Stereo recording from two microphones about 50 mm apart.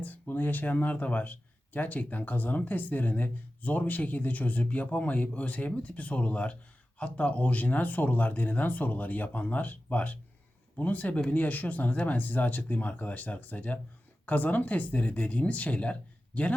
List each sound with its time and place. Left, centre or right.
0.3 s a man's voice: left